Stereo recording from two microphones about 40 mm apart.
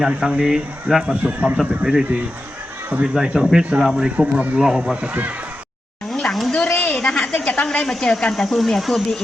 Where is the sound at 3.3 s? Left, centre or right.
Centre.